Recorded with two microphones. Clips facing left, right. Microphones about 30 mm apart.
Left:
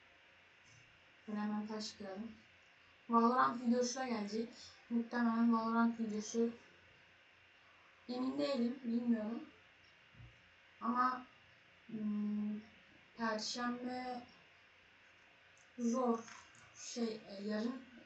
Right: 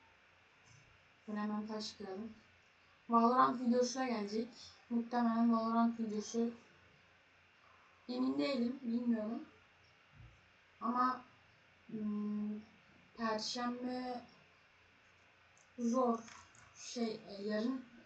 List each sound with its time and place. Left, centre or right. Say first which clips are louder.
1.6 s speech: right 1 dB; centre
8.0 s speech: right 2 dB; centre
10.8 s a sound: right 1 dB; centre
11.9 s speech: even; centre
13.1 s speech: right 1 dB; centre
15.8 s speech: right 2 dB; centre
16.8 s a sound: right 1 dB; centre
17.2 s speech: right 2 dB; centre